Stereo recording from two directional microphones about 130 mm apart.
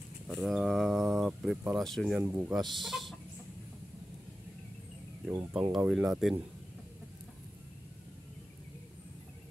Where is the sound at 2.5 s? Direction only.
Centre (ahead or behind).